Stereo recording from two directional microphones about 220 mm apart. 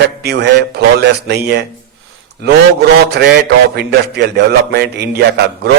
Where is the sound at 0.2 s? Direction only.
50° right (ahead or behind).